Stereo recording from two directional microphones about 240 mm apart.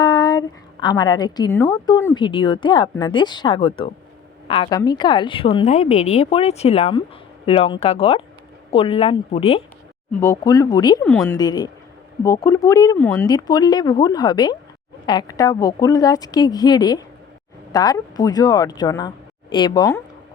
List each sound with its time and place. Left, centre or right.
0.0 s a woman's voice: centre
10.2 s a woman's voice: centre